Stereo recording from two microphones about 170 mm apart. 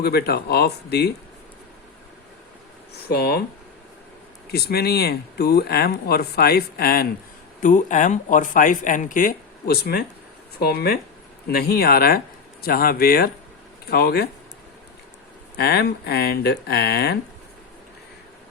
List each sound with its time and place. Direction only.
0.0 s speech: 70° left (ahead or behind)
3.0 s speech: 70° left (ahead or behind)
4.5 s speech: 65° left (ahead or behind)
7.6 s speech: 45° left (ahead or behind); by 14.3 s 65° left (ahead or behind)
15.5 s speech: 70° left (ahead or behind)